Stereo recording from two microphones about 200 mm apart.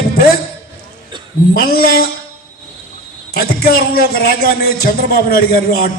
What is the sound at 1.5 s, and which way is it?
Speech, 50° left (ahead or behind).